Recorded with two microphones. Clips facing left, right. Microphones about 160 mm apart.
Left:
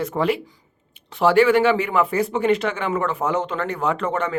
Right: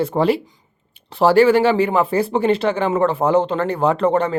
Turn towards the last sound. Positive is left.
turn(degrees=-35)  # may be behind; listen again after turning